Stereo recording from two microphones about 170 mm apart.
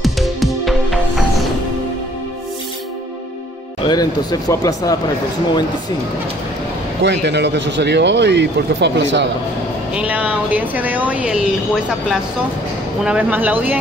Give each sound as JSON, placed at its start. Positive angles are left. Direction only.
{"t": 0.0, "sound": "music", "side_deg": 0}
{"t": 3.8, "sound": "speech", "side_deg": 25}
{"t": 7.0, "sound": "speech", "side_deg": -90}
{"t": 9.9, "sound": "speech", "side_deg": -10}